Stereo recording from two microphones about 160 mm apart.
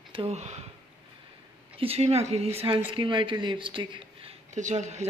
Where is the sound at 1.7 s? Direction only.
40° right (ahead or behind).